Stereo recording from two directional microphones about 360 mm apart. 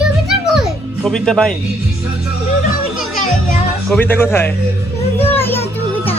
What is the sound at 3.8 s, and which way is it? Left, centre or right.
A child's voice, centre.